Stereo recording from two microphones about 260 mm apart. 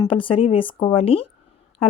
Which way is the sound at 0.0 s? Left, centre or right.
Centre.